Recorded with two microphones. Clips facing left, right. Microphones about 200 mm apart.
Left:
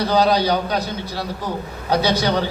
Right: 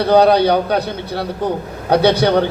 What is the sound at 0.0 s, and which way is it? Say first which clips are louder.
Speech: right 6 dB; 60° right (ahead or behind).